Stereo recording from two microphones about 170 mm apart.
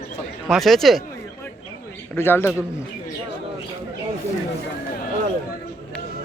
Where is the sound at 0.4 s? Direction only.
Centre (ahead or behind).